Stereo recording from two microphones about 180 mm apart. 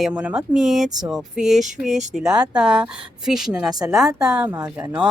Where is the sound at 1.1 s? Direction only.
Centre (ahead or behind).